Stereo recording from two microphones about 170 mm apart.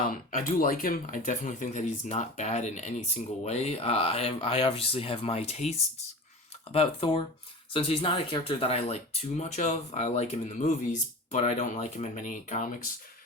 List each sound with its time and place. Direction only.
0.1 s speech: 55° left (ahead or behind)